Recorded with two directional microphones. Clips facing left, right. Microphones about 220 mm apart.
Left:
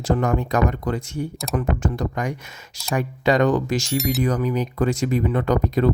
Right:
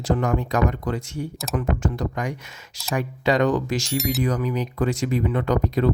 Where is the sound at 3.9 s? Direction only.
Centre (ahead or behind).